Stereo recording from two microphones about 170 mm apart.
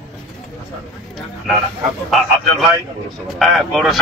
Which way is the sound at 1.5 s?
Centre (ahead or behind).